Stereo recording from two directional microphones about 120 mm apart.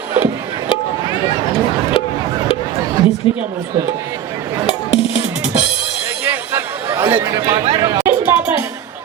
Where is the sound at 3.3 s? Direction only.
45° left (ahead or behind).